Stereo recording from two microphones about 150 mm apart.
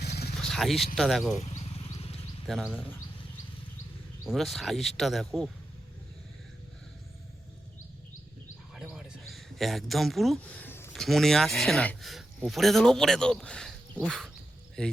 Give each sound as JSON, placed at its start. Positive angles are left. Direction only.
{"t": 0.0, "sound": "a sound", "side_deg": 90}
{"t": 0.3, "sound": "a sound", "side_deg": 0}
{"t": 0.9, "sound": "speech", "side_deg": 0}
{"t": 1.4, "sound": "wild animals", "side_deg": 45}
{"t": 2.5, "sound": "speech", "side_deg": 0}
{"t": 4.3, "sound": "speech", "side_deg": 0}
{"t": 8.7, "sound": "a sound", "side_deg": 0}
{"t": 10.9, "sound": "speech", "side_deg": 0}
{"t": 14.8, "sound": "speech", "side_deg": 5}